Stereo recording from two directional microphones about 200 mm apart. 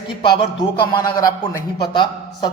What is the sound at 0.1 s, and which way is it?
A man's voice, 25° left (ahead or behind).